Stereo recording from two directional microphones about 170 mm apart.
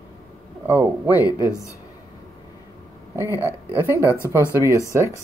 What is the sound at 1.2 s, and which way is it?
Speech, 20° left (ahead or behind).